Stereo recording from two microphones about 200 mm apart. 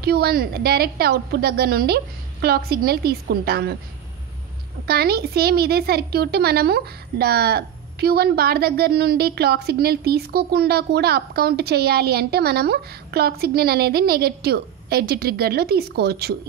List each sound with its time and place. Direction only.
0.0 s a woman's voice: 50° right (ahead or behind)
4.8 s a woman's voice: 50° right (ahead or behind)